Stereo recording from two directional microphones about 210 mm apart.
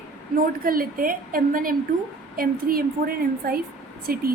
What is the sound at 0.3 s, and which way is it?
A woman's voice, 45° right (ahead or behind).